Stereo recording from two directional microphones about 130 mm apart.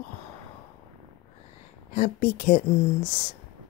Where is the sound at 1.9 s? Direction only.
90° left.